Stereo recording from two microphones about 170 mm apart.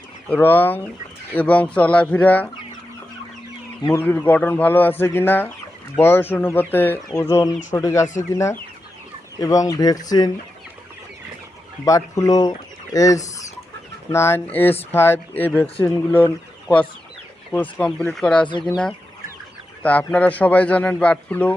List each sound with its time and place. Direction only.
0.3 s speech: 10° left (ahead or behind)
3.9 s speech: 10° left (ahead or behind)
11.9 s speech: 20° left (ahead or behind)
17.5 s speech: 10° left (ahead or behind)
19.8 s speech: 10° left (ahead or behind)